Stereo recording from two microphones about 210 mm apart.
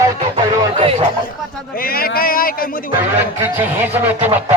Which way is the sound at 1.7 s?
45° left (ahead or behind).